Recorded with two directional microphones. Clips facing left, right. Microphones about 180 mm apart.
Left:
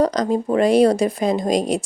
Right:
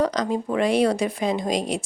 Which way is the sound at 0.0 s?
40° left (ahead or behind).